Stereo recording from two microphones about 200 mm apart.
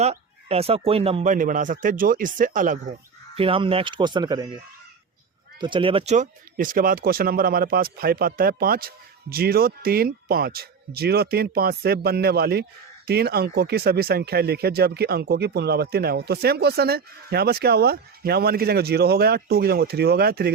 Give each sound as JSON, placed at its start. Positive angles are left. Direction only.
{"t": 0.0, "sound": "speech", "side_deg": -30}
{"t": 3.3, "sound": "speech", "side_deg": -25}
{"t": 5.5, "sound": "speech", "side_deg": -25}